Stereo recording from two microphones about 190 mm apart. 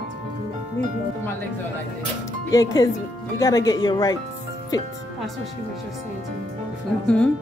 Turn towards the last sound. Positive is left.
turn(degrees=5)  # may be behind; listen again after turning